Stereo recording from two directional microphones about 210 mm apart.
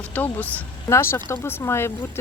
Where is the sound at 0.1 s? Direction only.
5° left (ahead or behind).